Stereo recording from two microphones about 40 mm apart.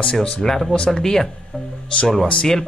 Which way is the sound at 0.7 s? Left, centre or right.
Left.